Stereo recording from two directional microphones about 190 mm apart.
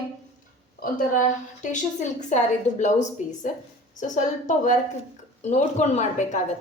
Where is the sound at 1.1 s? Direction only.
40° left (ahead or behind).